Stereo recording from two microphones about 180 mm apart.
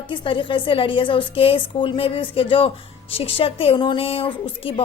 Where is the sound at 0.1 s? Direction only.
25° left (ahead or behind).